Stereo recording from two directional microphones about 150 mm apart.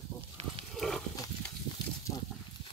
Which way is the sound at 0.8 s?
5° left (ahead or behind).